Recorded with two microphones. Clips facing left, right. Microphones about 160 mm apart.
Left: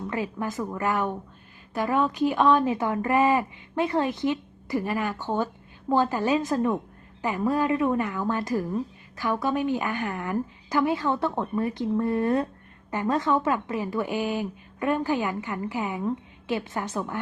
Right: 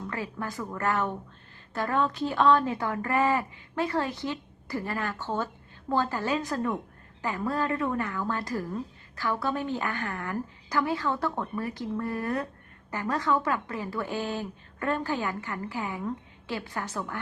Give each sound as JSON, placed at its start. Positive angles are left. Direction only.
{"t": 0.1, "sound": "a woman's voice", "side_deg": 20}